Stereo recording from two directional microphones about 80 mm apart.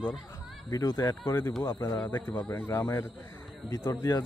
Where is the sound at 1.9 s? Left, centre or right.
Left.